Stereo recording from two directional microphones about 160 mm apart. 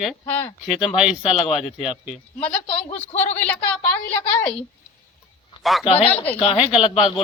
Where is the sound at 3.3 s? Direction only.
10° left (ahead or behind).